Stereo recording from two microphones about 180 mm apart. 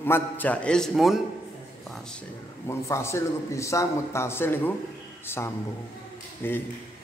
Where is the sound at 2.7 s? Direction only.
15° left (ahead or behind).